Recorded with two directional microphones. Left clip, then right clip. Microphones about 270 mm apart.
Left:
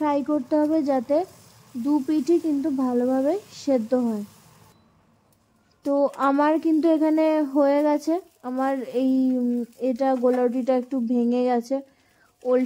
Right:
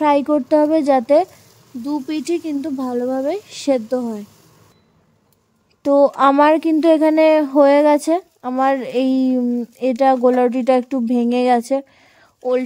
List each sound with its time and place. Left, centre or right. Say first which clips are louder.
0.0 s speech: right 8 dB; right
5.8 s speech: right 9 dB; right